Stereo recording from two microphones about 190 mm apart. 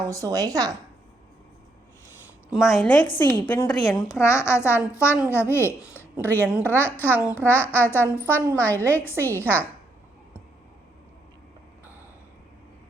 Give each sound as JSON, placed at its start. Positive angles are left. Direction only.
{"t": 0.0, "sound": "a woman's voice", "side_deg": -20}
{"t": 2.5, "sound": "a woman's voice", "side_deg": 0}
{"t": 5.8, "sound": "a sound", "side_deg": -10}
{"t": 6.2, "sound": "a child's voice", "side_deg": 10}
{"t": 7.2, "sound": "a child's voice", "side_deg": -10}
{"t": 7.4, "sound": "a child's voice", "side_deg": 10}